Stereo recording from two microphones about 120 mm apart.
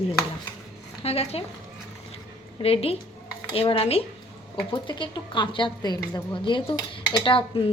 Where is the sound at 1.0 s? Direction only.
55° left (ahead or behind).